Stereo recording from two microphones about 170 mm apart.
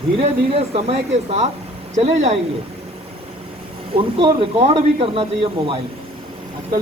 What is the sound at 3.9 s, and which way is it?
A man's voice, 30° right (ahead or behind).